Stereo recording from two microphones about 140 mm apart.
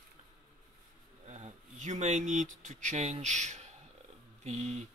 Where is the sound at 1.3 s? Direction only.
55° right (ahead or behind).